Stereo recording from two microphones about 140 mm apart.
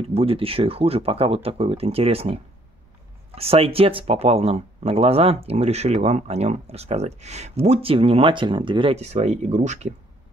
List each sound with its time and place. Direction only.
0.1 s speech: 40° right (ahead or behind)
8.9 s speech: 50° right (ahead or behind)